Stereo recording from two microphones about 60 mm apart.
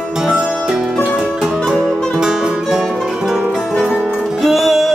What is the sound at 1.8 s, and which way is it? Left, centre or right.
Music, centre.